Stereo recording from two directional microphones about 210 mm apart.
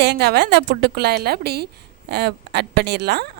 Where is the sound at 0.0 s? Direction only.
50° right (ahead or behind).